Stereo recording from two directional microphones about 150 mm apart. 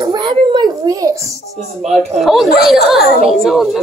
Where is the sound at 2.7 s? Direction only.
Centre (ahead or behind).